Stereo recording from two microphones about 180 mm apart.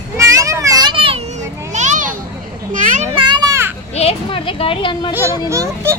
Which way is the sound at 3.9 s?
30° left (ahead or behind).